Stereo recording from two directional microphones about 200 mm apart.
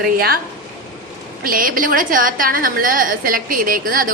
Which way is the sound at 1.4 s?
45° right (ahead or behind).